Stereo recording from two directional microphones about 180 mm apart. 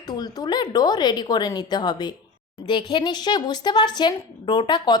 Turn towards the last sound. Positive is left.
turn(degrees=25)  # may be behind; listen again after turning